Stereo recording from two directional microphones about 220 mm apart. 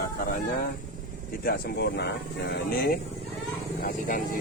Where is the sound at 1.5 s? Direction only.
45° left (ahead or behind).